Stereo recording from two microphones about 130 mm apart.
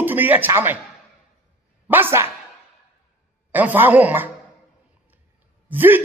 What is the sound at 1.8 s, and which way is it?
Speech, 15° right (ahead or behind).